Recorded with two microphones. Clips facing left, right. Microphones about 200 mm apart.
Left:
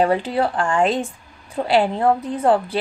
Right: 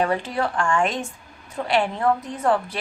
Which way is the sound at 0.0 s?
30° left (ahead or behind).